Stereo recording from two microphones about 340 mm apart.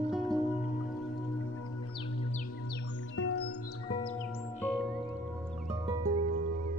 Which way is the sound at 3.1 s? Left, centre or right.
Left.